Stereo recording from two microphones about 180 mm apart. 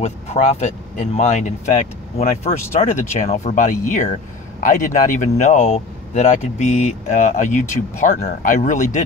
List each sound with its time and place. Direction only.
0.0 s speech: 35° left (ahead or behind)